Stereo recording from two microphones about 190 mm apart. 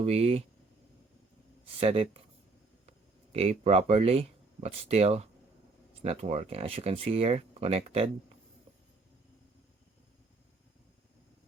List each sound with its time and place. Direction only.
0.0 s speech: 30° right (ahead or behind)
1.8 s speech: 30° right (ahead or behind)
3.3 s speech: 35° right (ahead or behind)